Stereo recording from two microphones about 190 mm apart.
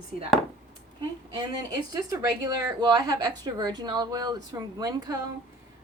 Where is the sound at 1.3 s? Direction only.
20° right (ahead or behind).